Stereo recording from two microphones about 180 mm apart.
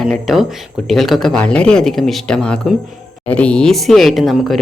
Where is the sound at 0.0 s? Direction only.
Centre (ahead or behind).